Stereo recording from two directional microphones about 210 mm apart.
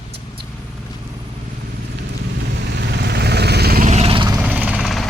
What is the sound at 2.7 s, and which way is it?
Vehicle, 55° right (ahead or behind).